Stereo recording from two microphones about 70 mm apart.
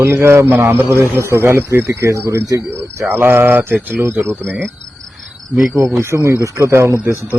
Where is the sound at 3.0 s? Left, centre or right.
Right.